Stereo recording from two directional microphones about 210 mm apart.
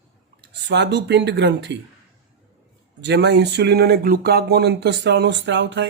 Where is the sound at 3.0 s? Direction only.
55° right (ahead or behind).